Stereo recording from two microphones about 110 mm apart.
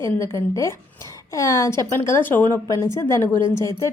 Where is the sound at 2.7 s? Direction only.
30° left (ahead or behind).